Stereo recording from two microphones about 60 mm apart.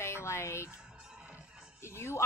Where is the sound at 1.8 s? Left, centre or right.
Left.